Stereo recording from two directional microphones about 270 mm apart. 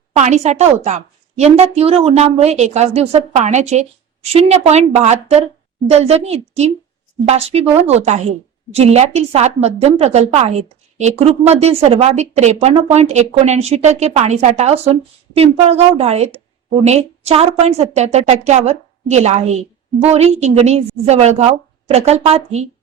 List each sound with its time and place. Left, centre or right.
0.2 s a woman's voice: right